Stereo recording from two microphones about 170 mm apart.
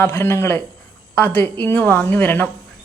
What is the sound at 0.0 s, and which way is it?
A woman's voice, 15° left (ahead or behind).